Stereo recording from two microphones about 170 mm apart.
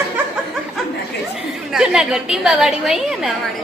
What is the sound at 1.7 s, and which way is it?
A woman's voice, 5° right (ahead or behind).